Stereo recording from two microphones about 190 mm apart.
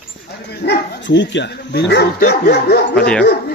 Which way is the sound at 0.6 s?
65° left (ahead or behind).